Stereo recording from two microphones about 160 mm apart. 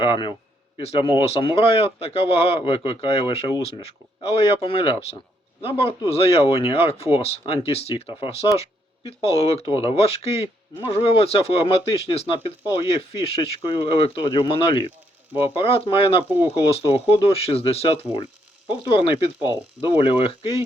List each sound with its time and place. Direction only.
0.0 s speech: 30° left (ahead or behind)
15.3 s speech: 10° right (ahead or behind)
15.5 s speech: 35° left (ahead or behind)